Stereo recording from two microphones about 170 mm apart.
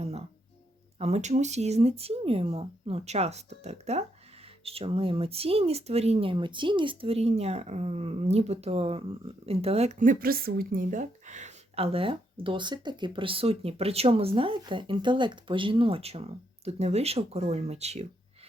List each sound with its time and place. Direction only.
0.0 s music: 40° right (ahead or behind)
0.9 s speech: 40° right (ahead or behind)